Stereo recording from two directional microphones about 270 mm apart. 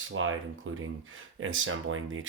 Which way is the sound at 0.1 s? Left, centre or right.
Right.